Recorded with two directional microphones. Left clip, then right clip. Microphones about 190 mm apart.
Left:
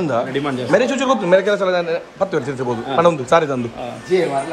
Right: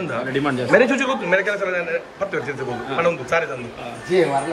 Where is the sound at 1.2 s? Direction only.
20° left (ahead or behind).